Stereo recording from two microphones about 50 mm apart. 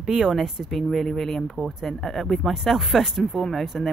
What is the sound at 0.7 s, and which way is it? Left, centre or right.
Speech, centre.